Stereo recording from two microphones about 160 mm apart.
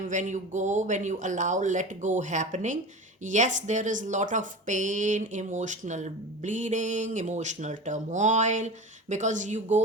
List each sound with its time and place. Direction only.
0.1 s speech: 50° right (ahead or behind)